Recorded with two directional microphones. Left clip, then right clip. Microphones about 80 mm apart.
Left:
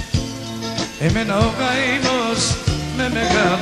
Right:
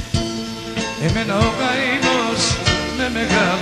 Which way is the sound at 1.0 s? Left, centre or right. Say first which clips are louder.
Left 1 dB; right.